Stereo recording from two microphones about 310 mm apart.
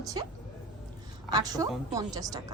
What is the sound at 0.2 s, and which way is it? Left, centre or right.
A woman's voice, centre.